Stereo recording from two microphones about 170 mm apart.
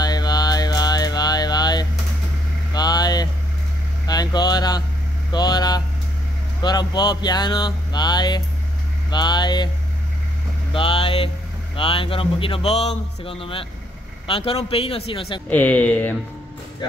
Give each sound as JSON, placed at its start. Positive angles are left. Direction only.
{"t": 0.0, "sound": "mantra", "side_deg": 25}
{"t": 2.7, "sound": "vehicle", "side_deg": 25}
{"t": 5.3, "sound": "hum", "side_deg": 25}
{"t": 6.6, "sound": "speech", "side_deg": 25}
{"t": 10.7, "sound": "a man's voice", "side_deg": 30}
{"t": 15.5, "sound": "speech", "side_deg": 10}